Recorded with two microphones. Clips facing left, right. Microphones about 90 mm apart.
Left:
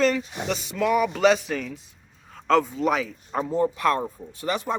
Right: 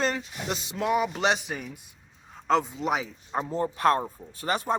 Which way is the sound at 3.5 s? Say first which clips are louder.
Left 1 dB; 35° right (ahead or behind).